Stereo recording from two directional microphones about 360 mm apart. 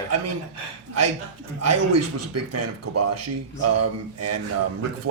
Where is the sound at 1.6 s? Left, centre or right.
Right.